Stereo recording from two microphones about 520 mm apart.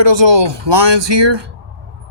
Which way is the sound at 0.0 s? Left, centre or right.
Right.